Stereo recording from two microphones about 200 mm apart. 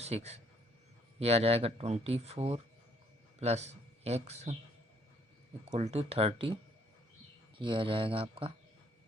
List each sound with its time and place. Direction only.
0.0 s speech: 30° right (ahead or behind)
5.7 s speech: 30° right (ahead or behind)
7.6 s speech: 25° right (ahead or behind)